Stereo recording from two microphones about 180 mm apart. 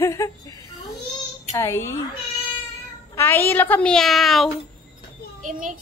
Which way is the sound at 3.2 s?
15° left (ahead or behind).